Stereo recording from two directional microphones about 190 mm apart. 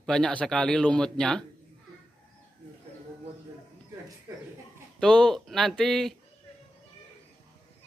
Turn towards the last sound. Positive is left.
turn(degrees=0)  # may be behind; listen again after turning